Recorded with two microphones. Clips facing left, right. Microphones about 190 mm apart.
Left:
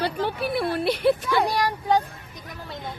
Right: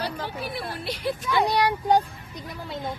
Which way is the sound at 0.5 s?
65° left (ahead or behind).